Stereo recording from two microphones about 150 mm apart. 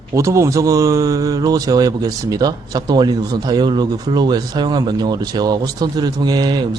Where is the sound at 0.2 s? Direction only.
20° right (ahead or behind).